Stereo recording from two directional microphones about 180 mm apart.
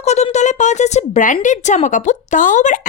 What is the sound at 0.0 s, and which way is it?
Speech, 40° left (ahead or behind).